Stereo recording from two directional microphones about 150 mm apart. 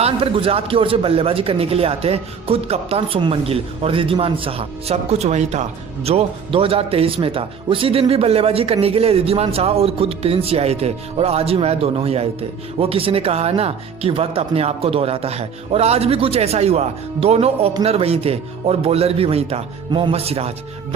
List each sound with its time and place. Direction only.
0.0 s a man's voice: 35° right (ahead or behind)
6.1 s a man's voice: 40° right (ahead or behind)